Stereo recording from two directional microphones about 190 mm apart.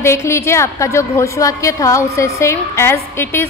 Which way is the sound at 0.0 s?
15° left (ahead or behind).